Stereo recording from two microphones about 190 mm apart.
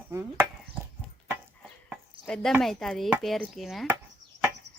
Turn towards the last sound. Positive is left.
turn(degrees=-65)  # may be behind; listen again after turning